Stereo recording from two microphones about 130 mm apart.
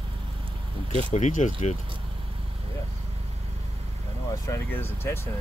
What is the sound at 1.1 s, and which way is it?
Speech, 70° left (ahead or behind).